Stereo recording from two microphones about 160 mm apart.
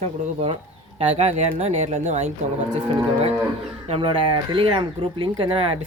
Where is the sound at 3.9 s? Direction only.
35° right (ahead or behind).